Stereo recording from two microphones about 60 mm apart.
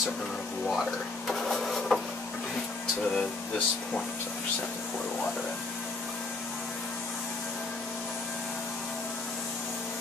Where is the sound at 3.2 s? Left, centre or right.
Centre.